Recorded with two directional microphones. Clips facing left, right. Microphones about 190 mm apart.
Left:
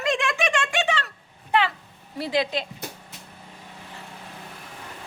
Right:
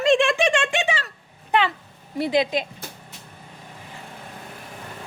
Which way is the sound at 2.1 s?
20° right (ahead or behind).